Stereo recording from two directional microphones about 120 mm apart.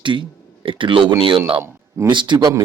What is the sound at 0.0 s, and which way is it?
Speech, 45° right (ahead or behind).